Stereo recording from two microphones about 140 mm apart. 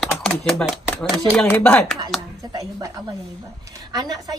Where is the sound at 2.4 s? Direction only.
25° right (ahead or behind).